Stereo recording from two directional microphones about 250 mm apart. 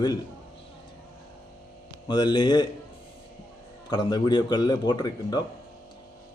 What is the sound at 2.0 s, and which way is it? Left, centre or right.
Speech, centre.